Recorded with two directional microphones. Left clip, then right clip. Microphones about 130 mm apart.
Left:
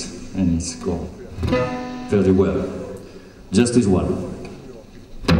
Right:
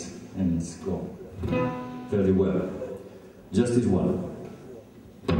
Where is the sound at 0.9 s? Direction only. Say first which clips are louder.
Left 6 dB; 30° left (ahead or behind).